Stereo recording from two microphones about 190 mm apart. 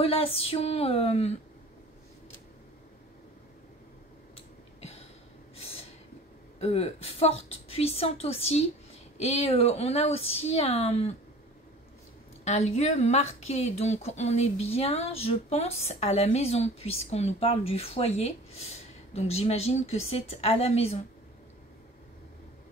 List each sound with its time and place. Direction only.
0.0 s speech: 30° left (ahead or behind)
4.7 s a sound: 30° left (ahead or behind)
6.6 s speech: 30° left (ahead or behind)
12.4 s speech: 35° left (ahead or behind)